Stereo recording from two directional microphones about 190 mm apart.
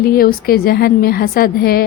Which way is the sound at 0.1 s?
50° left (ahead or behind).